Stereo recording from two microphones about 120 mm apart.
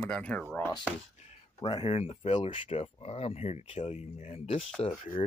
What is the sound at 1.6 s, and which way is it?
Speech, 40° left (ahead or behind).